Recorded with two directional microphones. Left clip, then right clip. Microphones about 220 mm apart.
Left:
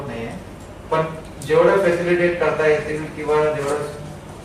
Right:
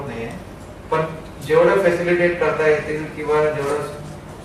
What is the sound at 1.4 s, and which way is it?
A man's voice, centre (ahead or behind).